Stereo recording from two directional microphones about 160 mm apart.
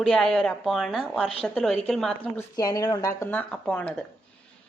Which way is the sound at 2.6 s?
25° left (ahead or behind).